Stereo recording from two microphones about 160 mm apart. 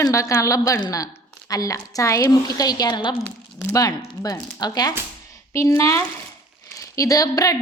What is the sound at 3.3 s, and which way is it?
A woman's voice, 15° left (ahead or behind).